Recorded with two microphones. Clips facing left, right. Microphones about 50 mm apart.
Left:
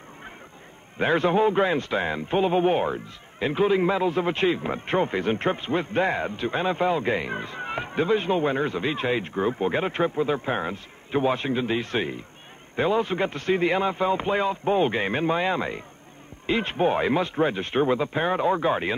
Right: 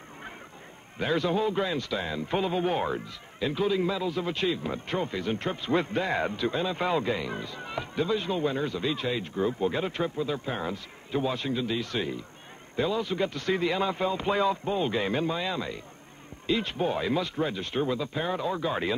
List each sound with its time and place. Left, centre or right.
0.9 s speech: left